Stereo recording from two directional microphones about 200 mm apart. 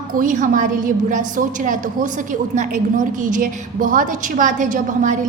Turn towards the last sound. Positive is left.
turn(degrees=-40)  # may be behind; listen again after turning